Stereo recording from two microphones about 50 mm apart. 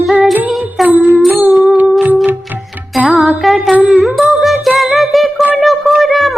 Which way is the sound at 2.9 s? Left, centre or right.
Centre.